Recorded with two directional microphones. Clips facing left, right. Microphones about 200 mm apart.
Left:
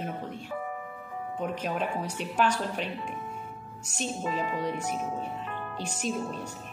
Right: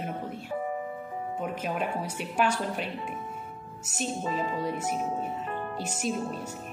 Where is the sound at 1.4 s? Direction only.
5° right (ahead or behind).